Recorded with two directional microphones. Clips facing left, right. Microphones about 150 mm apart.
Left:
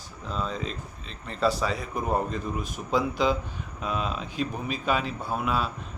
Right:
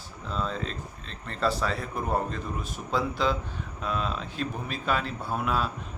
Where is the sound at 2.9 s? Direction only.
15° left (ahead or behind).